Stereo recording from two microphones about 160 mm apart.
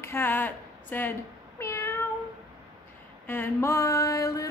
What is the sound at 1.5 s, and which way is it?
Meow, 15° left (ahead or behind).